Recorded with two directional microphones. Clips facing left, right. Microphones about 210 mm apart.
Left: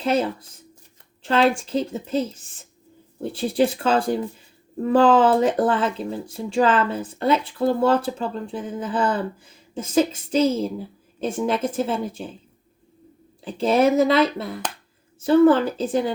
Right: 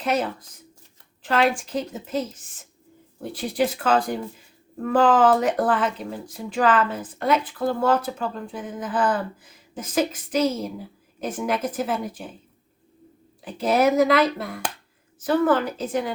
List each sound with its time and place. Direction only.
0.0 s speech: 30° left (ahead or behind)
13.4 s speech: 30° left (ahead or behind)